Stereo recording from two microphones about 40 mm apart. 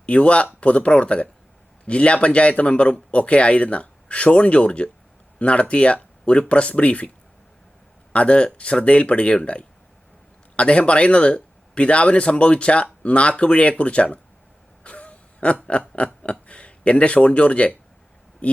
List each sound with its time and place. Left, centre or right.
0.0 s speech: left
8.1 s speech: left
14.8 s a sound: left
16.2 s a man's voice: left